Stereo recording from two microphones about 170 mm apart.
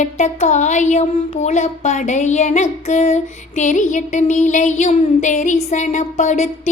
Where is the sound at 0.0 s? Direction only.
45° left (ahead or behind).